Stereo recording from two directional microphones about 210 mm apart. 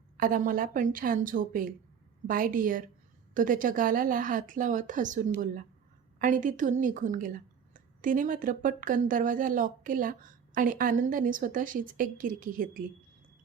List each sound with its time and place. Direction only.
0.2 s speech: 40° right (ahead or behind)